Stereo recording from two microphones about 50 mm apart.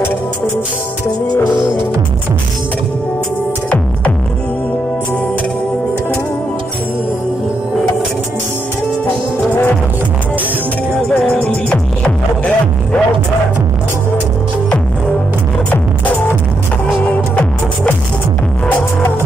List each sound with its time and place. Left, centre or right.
11.1 s music: centre
17.1 s music: left